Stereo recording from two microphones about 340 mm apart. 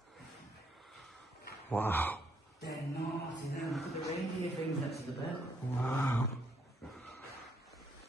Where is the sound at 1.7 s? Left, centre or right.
Centre.